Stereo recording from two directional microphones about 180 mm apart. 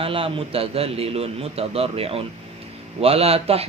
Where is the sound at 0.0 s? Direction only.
30° right (ahead or behind).